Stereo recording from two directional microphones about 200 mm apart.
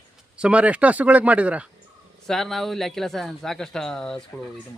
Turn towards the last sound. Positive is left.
turn(degrees=5)  # may be behind; listen again after turning